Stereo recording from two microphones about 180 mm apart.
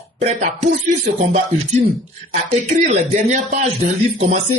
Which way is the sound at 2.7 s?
40° right (ahead or behind).